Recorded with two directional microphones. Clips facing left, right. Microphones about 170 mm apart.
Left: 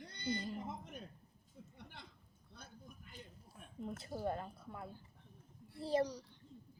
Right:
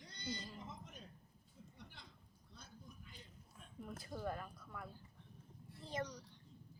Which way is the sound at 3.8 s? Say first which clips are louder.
Left 4 dB; 25° left (ahead or behind).